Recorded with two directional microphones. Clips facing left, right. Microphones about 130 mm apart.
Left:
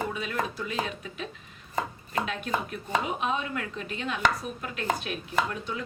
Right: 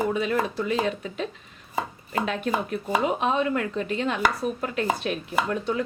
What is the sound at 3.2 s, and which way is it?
Speech, 40° right (ahead or behind).